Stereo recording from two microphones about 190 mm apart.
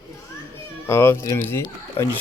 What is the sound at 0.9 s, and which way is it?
Speech, 15° left (ahead or behind).